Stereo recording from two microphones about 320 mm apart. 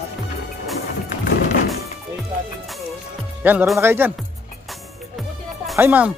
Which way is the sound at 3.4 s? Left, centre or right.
Centre.